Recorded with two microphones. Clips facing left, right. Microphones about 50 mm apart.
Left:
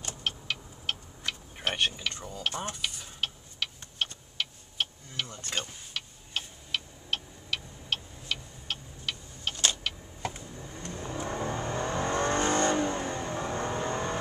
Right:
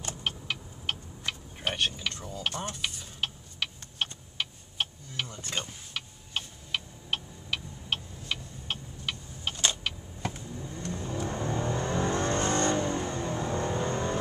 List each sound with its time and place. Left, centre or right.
0.0 s vehicle: centre
1.8 s speech: centre
3.6 s tick-tock: centre
4.0 s vehicle: centre
10.3 s vehicle: centre